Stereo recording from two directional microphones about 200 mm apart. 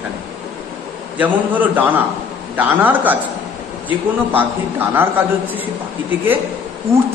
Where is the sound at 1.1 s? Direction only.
10° right (ahead or behind).